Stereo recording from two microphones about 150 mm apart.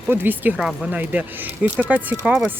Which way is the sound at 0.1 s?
15° right (ahead or behind).